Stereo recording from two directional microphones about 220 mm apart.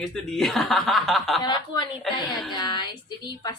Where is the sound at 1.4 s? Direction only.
20° left (ahead or behind).